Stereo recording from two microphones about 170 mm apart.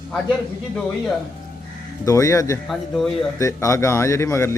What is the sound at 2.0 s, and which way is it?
Speech, 20° left (ahead or behind).